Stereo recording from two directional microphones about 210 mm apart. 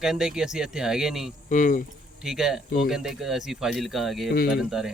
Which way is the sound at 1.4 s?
40° left (ahead or behind).